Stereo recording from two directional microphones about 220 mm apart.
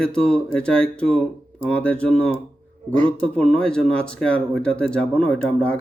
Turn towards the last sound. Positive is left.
turn(degrees=5)  # may be behind; listen again after turning